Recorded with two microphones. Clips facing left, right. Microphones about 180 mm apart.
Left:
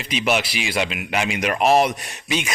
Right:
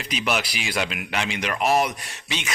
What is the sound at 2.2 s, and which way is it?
Speech, 10° left (ahead or behind).